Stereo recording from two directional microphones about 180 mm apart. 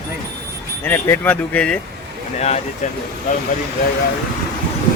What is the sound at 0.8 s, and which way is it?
Speech, 10° left (ahead or behind).